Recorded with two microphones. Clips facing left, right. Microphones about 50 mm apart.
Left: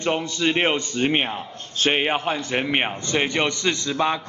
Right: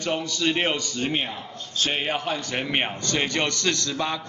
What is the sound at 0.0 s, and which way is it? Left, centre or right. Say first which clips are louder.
A man's voice: left 3 dB; left.